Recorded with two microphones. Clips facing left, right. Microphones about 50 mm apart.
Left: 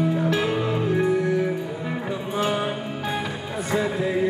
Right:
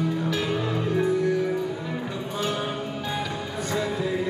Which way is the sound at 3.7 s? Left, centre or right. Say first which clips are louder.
Left 3 dB; left.